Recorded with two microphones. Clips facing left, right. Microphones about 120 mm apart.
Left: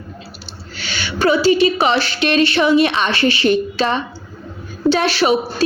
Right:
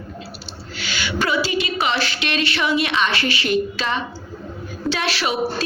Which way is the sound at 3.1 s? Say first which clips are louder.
Left 6 dB; 30° left (ahead or behind).